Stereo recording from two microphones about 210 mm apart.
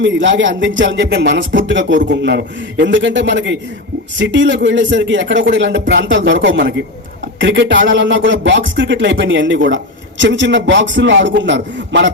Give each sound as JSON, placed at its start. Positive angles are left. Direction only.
{"t": 0.0, "sound": "speech", "side_deg": -60}